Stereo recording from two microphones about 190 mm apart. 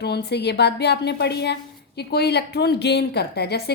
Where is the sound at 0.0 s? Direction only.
60° left (ahead or behind).